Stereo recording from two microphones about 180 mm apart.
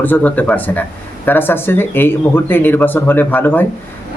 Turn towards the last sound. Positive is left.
turn(degrees=10)  # may be behind; listen again after turning